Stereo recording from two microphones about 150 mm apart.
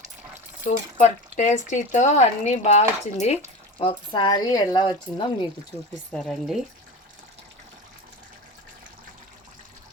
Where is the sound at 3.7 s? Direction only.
35° left (ahead or behind).